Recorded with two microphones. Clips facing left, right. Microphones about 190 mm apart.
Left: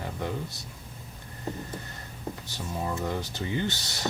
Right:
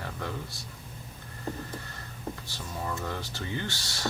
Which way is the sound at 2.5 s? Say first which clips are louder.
Left 5 dB; 20° left (ahead or behind).